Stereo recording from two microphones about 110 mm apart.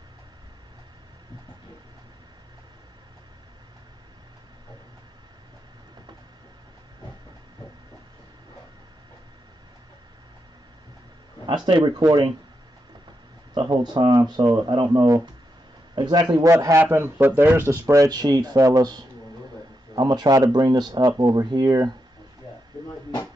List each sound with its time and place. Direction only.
11.4 s speech: 45° right (ahead or behind)
13.6 s speech: 40° right (ahead or behind)
16.4 s a man's voice: 25° right (ahead or behind)
22.7 s a sound: 35° right (ahead or behind)